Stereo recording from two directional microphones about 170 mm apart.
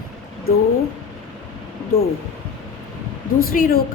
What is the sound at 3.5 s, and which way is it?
Speech, 60° left (ahead or behind).